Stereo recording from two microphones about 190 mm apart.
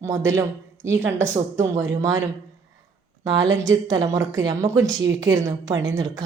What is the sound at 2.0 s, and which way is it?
Speech, 15° right (ahead or behind).